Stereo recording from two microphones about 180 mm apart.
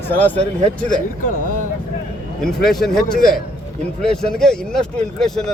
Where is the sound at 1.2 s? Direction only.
45° left (ahead or behind).